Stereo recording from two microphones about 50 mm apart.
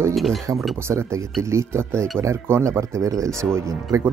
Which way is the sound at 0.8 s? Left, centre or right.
Right.